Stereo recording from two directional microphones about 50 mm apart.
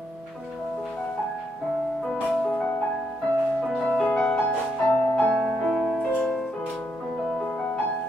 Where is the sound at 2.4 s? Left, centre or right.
Centre.